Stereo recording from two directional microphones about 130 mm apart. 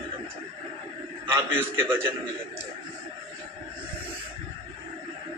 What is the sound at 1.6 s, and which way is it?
Speech, 20° right (ahead or behind).